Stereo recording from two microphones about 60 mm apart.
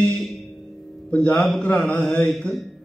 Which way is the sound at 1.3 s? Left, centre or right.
Centre.